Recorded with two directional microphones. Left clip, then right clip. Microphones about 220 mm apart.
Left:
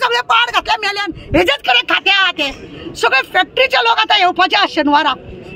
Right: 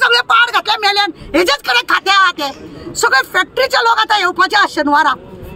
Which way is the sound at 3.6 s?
10° right (ahead or behind).